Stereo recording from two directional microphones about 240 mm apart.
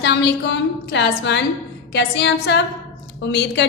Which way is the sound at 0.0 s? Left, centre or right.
Left.